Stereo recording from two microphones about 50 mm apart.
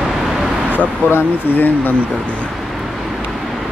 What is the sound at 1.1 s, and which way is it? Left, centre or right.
Speech, left.